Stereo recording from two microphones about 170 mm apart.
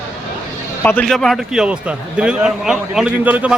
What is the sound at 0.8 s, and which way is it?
A man's voice, 10° left (ahead or behind).